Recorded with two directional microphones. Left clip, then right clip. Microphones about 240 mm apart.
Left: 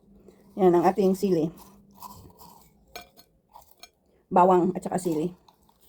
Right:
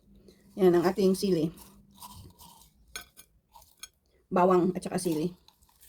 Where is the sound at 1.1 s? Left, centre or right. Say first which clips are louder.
Left 3 dB; centre.